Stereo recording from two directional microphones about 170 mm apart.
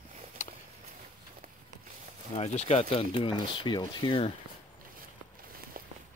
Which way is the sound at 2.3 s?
40° left (ahead or behind).